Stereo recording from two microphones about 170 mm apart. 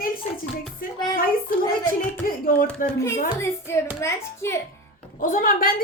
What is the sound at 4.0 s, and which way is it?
Speech, 15° left (ahead or behind).